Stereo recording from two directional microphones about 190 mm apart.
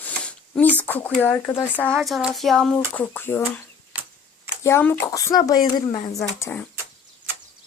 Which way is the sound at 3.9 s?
10° right (ahead or behind).